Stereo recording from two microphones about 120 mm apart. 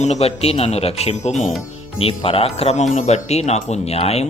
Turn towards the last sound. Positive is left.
turn(degrees=60)  # may be behind; listen again after turning